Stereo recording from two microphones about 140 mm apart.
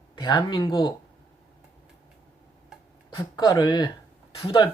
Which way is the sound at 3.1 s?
30° left (ahead or behind).